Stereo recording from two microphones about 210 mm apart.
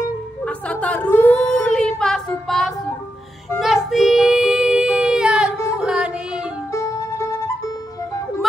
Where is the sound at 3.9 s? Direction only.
Centre (ahead or behind).